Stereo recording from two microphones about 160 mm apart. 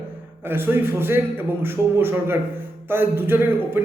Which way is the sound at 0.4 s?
15° right (ahead or behind).